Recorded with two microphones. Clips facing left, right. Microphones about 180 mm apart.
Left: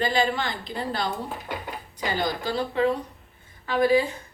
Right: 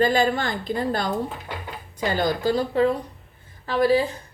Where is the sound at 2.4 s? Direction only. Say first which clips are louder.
Right 3 dB; 40° right (ahead or behind).